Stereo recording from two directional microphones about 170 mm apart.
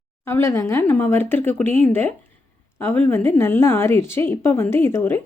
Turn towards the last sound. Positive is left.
turn(degrees=15)  # may be behind; listen again after turning